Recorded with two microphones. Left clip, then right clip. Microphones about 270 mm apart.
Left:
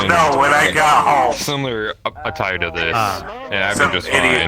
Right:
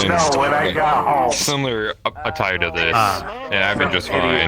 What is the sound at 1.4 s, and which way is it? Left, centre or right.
Speech, centre.